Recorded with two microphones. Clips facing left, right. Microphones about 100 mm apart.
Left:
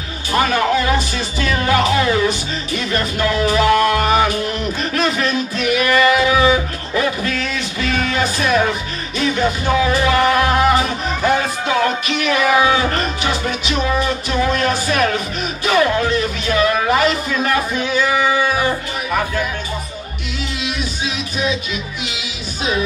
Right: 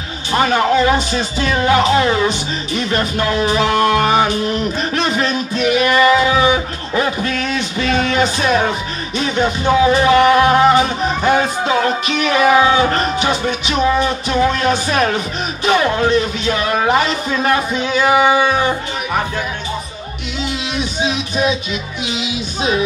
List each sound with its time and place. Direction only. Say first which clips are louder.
0.3 s speech: right 2 dB; 25° right (ahead or behind)
20.6 s music: right 4 dB; 25° right (ahead or behind)
22.0 s speech: right 6 dB; 25° right (ahead or behind)